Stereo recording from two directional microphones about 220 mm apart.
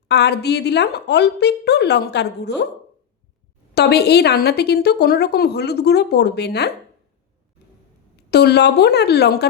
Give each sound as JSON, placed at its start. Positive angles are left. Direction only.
{"t": 0.1, "sound": "a woman's voice", "side_deg": 50}
{"t": 3.8, "sound": "a woman's voice", "side_deg": 45}
{"t": 8.3, "sound": "a woman's voice", "side_deg": 45}